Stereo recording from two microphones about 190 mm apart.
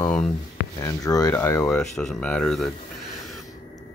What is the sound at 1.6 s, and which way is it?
Speech, 5° left (ahead or behind).